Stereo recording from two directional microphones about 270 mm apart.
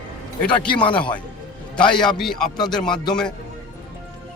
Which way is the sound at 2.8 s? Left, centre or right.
Centre.